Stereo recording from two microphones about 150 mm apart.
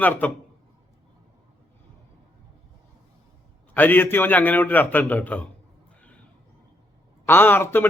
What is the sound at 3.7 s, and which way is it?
A man's voice, 15° left (ahead or behind).